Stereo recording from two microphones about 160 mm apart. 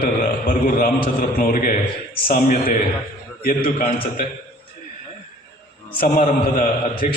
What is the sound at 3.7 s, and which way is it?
Speech, 55° left (ahead or behind).